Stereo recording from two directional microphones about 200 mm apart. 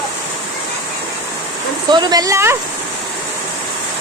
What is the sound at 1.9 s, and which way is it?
Speech, 20° right (ahead or behind).